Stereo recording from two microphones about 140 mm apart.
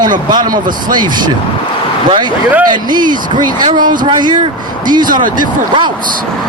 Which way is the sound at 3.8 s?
75° right (ahead or behind).